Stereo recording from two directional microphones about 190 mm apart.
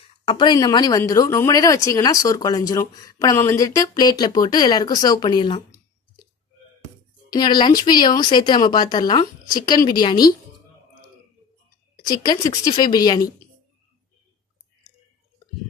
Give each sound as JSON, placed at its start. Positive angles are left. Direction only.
{"t": 0.3, "sound": "speech", "side_deg": 25}
{"t": 7.3, "sound": "speech", "side_deg": 20}
{"t": 12.0, "sound": "speech", "side_deg": 20}